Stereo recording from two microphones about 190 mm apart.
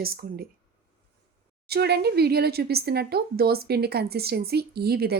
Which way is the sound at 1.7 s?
60° right (ahead or behind).